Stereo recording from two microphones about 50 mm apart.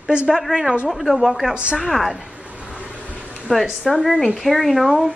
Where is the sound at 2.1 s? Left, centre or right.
Centre.